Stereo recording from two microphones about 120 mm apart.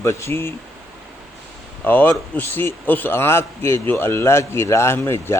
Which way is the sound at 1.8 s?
15° left (ahead or behind).